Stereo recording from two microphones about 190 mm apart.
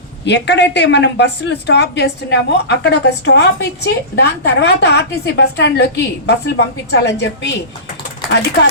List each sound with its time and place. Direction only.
0.3 s a woman's voice: 65° left (ahead or behind)